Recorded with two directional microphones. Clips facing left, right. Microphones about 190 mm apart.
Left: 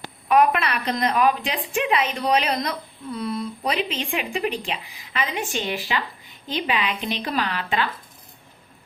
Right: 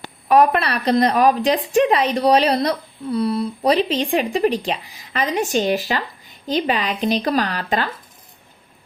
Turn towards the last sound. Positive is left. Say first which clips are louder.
# right 4 dB
turn(degrees=-40)  # may be behind; listen again after turning